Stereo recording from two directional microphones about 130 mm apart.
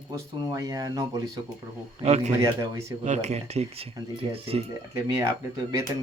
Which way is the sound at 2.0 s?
55° right (ahead or behind).